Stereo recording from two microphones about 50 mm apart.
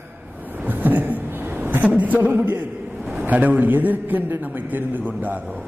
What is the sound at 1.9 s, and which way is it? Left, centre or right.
A man's voice, right.